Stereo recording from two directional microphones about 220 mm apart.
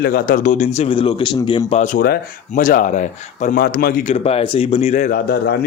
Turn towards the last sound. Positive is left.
turn(degrees=45)  # may be behind; listen again after turning